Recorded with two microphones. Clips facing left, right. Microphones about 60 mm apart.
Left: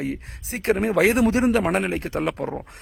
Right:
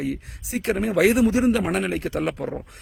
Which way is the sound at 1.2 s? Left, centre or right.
Left.